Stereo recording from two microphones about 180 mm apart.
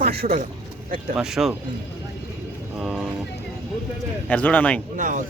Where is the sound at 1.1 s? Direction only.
Centre (ahead or behind).